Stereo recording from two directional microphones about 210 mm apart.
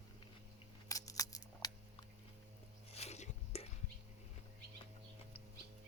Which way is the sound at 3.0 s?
30° left (ahead or behind).